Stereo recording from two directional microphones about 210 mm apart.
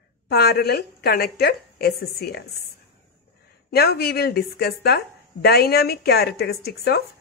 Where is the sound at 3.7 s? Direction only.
50° left (ahead or behind).